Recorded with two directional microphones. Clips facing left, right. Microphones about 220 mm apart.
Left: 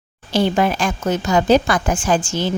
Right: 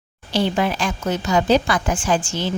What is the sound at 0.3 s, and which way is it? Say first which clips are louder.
A woman's voice: left 3 dB; 50° left (ahead or behind).